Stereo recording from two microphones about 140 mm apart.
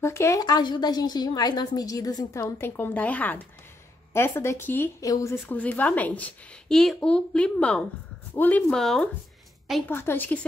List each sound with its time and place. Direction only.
0.0 s speech: 20° left (ahead or behind)
2.6 s a woman's voice: 15° left (ahead or behind)
9.8 s a woman's voice: 15° left (ahead or behind)